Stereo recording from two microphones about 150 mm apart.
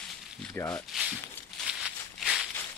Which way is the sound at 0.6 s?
5° left (ahead or behind).